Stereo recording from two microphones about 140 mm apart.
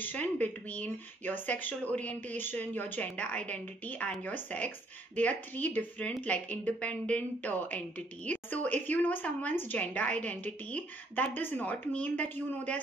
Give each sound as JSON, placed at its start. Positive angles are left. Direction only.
{"t": 0.0, "sound": "a woman's voice", "side_deg": 10}